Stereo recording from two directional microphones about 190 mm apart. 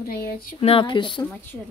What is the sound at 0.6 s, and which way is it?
Speech, 30° left (ahead or behind).